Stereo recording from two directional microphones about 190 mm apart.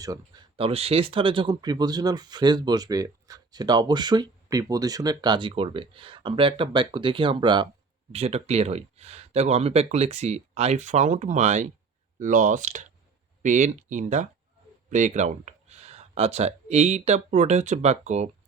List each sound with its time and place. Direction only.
0.0 s speech: 20° right (ahead or behind); by 18.3 s 35° right (ahead or behind)